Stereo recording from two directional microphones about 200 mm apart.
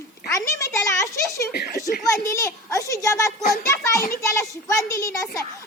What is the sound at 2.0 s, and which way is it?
A child's voice, 15° left (ahead or behind).